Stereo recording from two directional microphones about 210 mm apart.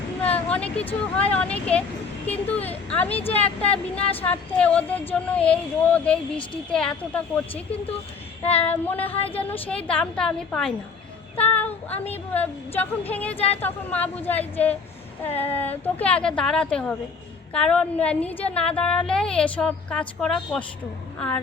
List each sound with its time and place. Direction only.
0.2 s vehicle: 5° left (ahead or behind)
1.2 s a woman's voice: 5° left (ahead or behind)
3.1 s speech: 30° left (ahead or behind)
4.2 s a woman's voice: 5° left (ahead or behind)
8.5 s speech: 10° left (ahead or behind)
9.1 s speech: 25° left (ahead or behind)
9.4 s a woman's voice: 5° left (ahead or behind)
11.3 s child singing: 10° left (ahead or behind)
11.9 s speech: 30° left (ahead or behind)
12.3 s speech: 10° left (ahead or behind)
13.3 s speech: 30° left (ahead or behind)
13.6 s a woman's voice: 10° left (ahead or behind)